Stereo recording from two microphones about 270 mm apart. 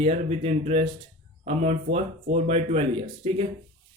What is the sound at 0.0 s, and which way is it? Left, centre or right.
A man's voice, right.